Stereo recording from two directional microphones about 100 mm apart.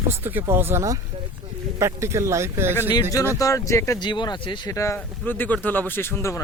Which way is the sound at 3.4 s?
35° left (ahead or behind).